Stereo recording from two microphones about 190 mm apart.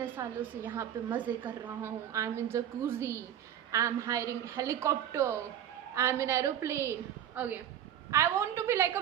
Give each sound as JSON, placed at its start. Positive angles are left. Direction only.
{"t": 0.0, "sound": "a woman's voice", "side_deg": -10}